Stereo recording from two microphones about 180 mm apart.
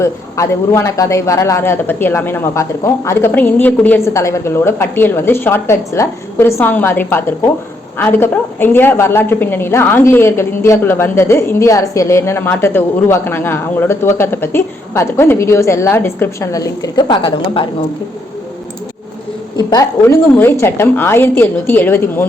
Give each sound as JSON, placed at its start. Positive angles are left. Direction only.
{"t": 0.0, "sound": "a woman's voice", "side_deg": 15}
{"t": 19.5, "sound": "a woman's voice", "side_deg": 20}